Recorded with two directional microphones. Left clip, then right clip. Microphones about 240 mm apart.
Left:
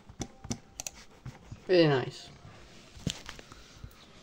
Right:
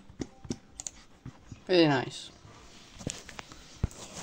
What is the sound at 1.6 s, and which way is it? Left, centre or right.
Speech, right.